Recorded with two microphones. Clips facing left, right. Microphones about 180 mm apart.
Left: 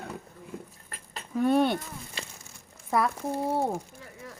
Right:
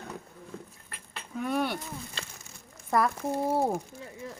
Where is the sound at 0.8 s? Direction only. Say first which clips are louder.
Left 2 dB; 40° left (ahead or behind).